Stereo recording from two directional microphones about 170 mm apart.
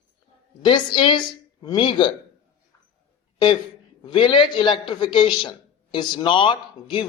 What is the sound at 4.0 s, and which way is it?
A man's voice, 30° left (ahead or behind).